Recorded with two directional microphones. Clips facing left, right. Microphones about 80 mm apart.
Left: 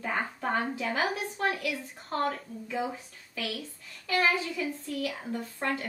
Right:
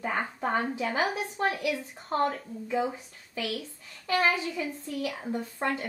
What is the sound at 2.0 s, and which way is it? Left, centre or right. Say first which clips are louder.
A woman's voice: right 3 dB; centre.